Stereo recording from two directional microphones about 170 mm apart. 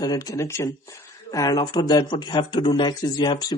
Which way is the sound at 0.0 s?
20° left (ahead or behind).